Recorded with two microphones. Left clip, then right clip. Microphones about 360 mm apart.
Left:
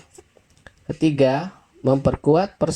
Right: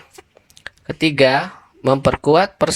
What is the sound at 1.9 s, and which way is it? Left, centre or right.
Speech, right.